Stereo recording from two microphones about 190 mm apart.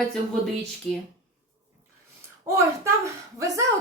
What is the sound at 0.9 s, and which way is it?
Speech, 5° left (ahead or behind).